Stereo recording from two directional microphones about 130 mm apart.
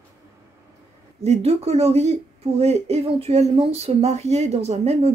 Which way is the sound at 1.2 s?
55° right (ahead or behind).